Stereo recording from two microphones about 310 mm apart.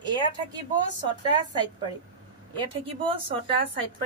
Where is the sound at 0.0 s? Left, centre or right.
Centre.